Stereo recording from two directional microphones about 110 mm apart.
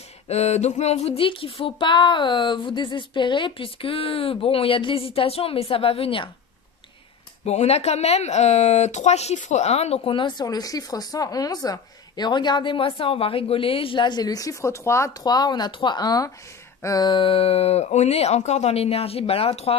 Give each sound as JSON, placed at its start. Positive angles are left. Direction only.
{"t": 0.3, "sound": "a sound", "side_deg": 85}
{"t": 7.4, "sound": "speech", "side_deg": 75}
{"t": 10.1, "sound": "speech", "side_deg": 45}
{"t": 10.4, "sound": "speech", "side_deg": 35}
{"t": 15.2, "sound": "speech", "side_deg": 35}
{"t": 17.1, "sound": "speech", "side_deg": 55}